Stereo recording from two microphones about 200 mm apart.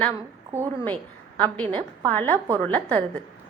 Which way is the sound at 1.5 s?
5° left (ahead or behind).